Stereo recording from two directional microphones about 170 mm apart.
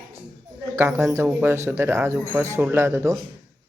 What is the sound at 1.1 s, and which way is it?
Speech, 15° right (ahead or behind).